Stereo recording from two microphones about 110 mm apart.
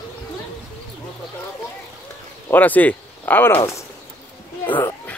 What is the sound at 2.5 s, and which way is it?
Speech, 15° left (ahead or behind).